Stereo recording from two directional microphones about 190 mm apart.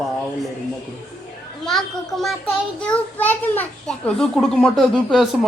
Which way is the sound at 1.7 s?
Centre (ahead or behind).